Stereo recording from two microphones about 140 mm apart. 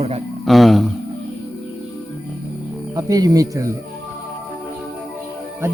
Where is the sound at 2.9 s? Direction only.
25° right (ahead or behind).